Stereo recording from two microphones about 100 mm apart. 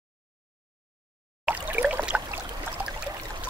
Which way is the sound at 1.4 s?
15° right (ahead or behind).